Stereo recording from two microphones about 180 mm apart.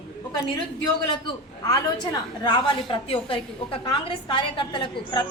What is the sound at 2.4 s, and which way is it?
A woman's voice, 25° left (ahead or behind).